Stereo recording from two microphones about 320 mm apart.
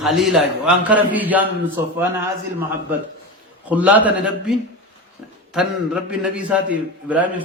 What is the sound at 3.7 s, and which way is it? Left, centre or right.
A man's voice, centre.